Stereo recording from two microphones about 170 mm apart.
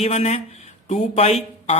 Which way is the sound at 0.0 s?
40° left (ahead or behind).